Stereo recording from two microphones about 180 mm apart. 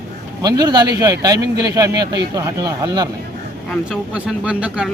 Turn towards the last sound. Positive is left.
turn(degrees=-5)  # may be behind; listen again after turning